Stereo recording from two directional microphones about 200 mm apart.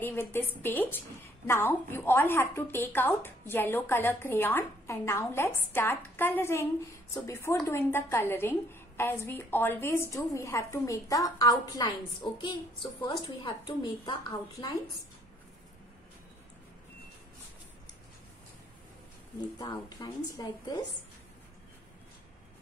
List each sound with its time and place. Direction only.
0.0 s a woman's voice: 10° left (ahead or behind)
19.6 s a woman's voice: 20° left (ahead or behind)